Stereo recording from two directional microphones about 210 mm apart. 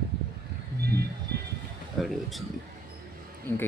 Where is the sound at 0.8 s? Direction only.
50° right (ahead or behind).